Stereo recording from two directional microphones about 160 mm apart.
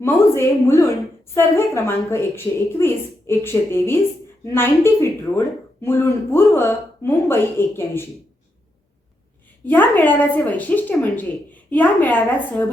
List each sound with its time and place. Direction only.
0.0 s a woman's voice: 15° left (ahead or behind)
9.6 s a woman's voice: 10° left (ahead or behind)